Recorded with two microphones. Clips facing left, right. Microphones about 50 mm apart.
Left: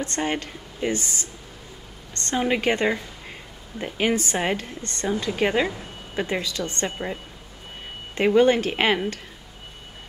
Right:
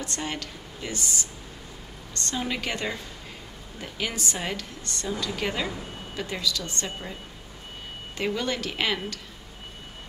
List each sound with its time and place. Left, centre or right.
0.0 s a woman's voice: left
8.2 s a woman's voice: left